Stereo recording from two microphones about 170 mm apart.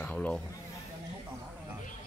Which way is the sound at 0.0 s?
10° left (ahead or behind).